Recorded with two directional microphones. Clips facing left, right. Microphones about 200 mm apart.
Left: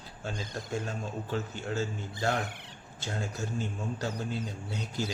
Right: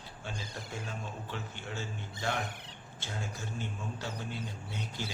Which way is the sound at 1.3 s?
40° left (ahead or behind).